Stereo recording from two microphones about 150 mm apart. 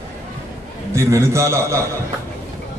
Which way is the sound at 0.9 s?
20° right (ahead or behind).